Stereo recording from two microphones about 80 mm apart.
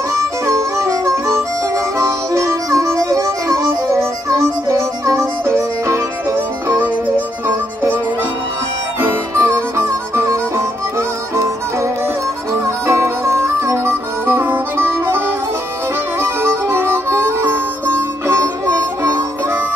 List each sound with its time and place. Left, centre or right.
0.1 s harmonica: right
6.8 s music: right
9.0 s music: right
12.8 s harmonica: right
16.2 s music: right